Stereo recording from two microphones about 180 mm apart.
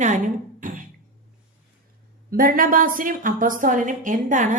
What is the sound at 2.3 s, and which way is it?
A woman's voice, 50° right (ahead or behind).